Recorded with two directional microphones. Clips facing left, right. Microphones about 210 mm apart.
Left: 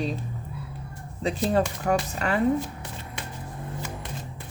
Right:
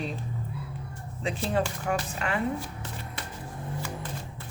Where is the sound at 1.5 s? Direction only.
40° left (ahead or behind).